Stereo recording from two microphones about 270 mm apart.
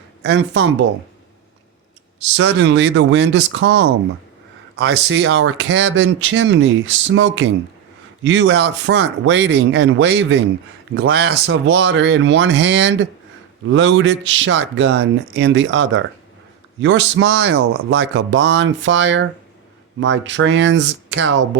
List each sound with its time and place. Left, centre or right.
0.2 s speech: right
2.2 s speech: right